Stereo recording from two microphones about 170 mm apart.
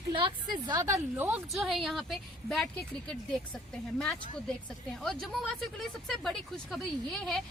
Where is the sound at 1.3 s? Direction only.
5° right (ahead or behind).